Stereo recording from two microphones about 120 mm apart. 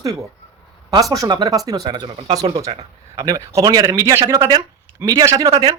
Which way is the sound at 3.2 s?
30° right (ahead or behind).